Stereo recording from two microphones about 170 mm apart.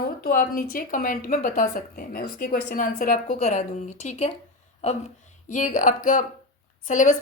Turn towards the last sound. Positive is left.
turn(degrees=50)  # may be behind; listen again after turning